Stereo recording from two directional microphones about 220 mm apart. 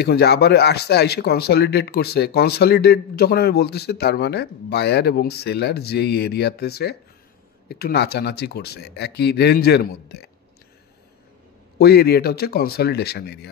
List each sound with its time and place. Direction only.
0.0 s speech: 50° left (ahead or behind)
11.8 s speech: 45° left (ahead or behind)